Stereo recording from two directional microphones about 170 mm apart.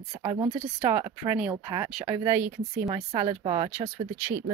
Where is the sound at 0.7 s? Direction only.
15° right (ahead or behind).